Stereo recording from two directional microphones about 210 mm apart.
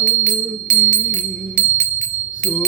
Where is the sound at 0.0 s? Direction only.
35° right (ahead or behind).